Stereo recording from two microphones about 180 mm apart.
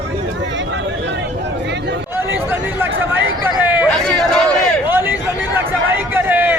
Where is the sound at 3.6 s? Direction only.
10° right (ahead or behind).